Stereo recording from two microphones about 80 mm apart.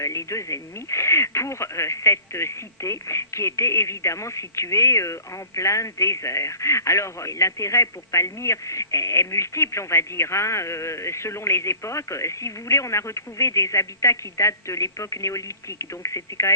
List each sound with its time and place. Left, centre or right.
0.0 s speech: left